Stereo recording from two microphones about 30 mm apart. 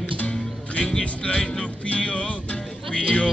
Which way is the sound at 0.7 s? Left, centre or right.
Left.